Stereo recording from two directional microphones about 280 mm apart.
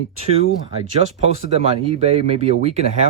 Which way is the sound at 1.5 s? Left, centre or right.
Right.